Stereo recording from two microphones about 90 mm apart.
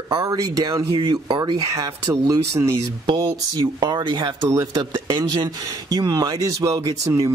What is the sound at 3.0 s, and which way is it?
Speech, 50° right (ahead or behind).